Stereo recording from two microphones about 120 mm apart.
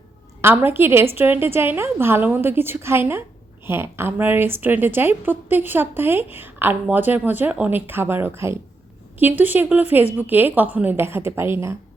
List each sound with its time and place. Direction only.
0.4 s a woman's voice: 15° right (ahead or behind)